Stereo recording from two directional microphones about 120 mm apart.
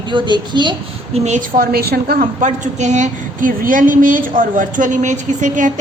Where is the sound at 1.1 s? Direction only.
65° right (ahead or behind).